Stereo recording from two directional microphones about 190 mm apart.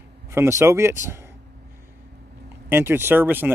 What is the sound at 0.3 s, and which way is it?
Speech, 15° right (ahead or behind).